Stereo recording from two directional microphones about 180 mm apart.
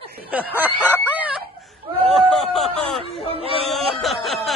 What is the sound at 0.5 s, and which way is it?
Snicker, 10° right (ahead or behind).